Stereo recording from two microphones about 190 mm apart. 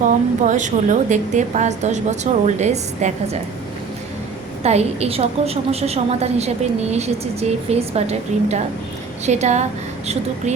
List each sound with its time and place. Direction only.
0.0 s a woman's voice: 40° right (ahead or behind)
4.6 s a woman's voice: 35° right (ahead or behind)